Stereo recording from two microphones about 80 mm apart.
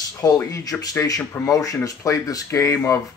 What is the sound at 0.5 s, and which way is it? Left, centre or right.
Speech, left.